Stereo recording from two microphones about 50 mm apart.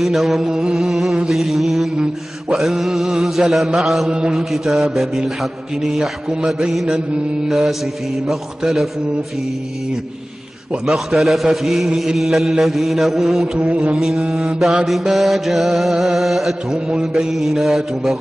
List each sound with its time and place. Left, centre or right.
0.0 s music: centre
4.1 s mantra: centre
4.4 s music: centre
10.7 s music: centre
16.7 s music: centre